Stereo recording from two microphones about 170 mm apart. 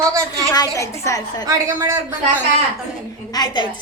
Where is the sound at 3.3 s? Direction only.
25° left (ahead or behind).